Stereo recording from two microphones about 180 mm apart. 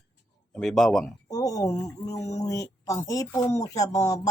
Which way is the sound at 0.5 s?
Centre (ahead or behind).